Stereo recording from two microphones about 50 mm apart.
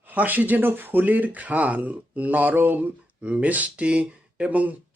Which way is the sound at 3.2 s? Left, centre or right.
Right.